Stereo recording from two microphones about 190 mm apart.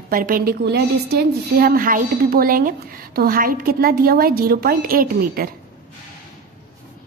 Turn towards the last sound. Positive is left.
turn(degrees=-50)  # may be behind; listen again after turning